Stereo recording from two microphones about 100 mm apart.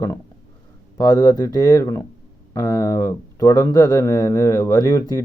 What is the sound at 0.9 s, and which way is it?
Speech, 40° left (ahead or behind).